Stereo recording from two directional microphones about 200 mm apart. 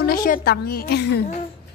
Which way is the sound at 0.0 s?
45° left (ahead or behind).